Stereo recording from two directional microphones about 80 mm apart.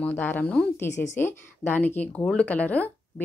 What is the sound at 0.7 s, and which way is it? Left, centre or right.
Speech, left.